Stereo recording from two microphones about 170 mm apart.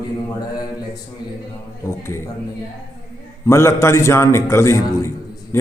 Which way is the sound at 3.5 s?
15° left (ahead or behind).